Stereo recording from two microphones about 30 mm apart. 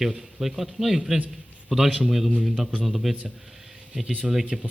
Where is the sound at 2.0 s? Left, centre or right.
Centre.